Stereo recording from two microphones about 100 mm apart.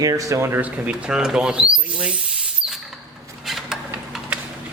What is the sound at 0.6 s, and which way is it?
A man's voice, 10° right (ahead or behind).